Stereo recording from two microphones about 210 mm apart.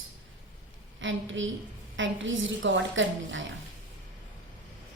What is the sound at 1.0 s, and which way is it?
A woman's voice, 65° right (ahead or behind).